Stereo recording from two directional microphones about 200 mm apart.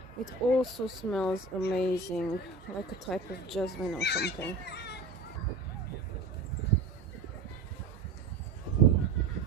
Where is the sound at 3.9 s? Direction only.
55° left (ahead or behind).